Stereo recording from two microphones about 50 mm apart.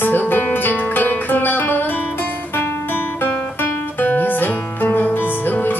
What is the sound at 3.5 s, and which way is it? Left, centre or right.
Guitar, left.